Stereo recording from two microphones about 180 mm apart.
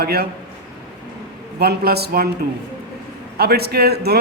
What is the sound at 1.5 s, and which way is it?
Speech, 60° right (ahead or behind).